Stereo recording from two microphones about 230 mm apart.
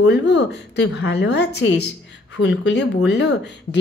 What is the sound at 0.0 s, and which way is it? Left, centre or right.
Speech, left.